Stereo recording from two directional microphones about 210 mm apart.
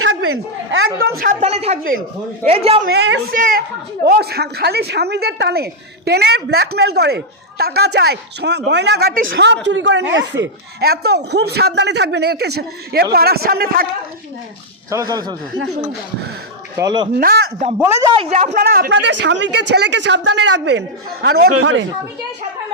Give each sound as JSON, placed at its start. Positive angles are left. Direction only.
{"t": 0.0, "sound": "a sound", "side_deg": -75}
{"t": 1.2, "sound": "a woman's voice", "side_deg": -35}
{"t": 2.8, "sound": "speech", "side_deg": -55}
{"t": 14.8, "sound": "speech", "side_deg": -15}
{"t": 16.7, "sound": "speech", "side_deg": -20}
{"t": 17.2, "sound": "speech", "side_deg": -45}
{"t": 18.0, "sound": "a woman's voice", "side_deg": -25}
{"t": 21.5, "sound": "speech", "side_deg": -75}